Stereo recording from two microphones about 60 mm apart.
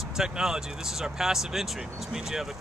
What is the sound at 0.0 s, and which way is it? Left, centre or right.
Speech, centre.